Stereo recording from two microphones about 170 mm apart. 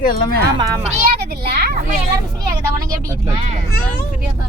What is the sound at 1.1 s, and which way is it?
Speech, 70° right (ahead or behind).